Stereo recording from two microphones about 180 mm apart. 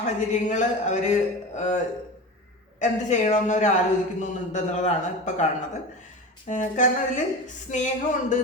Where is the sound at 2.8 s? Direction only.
40° left (ahead or behind).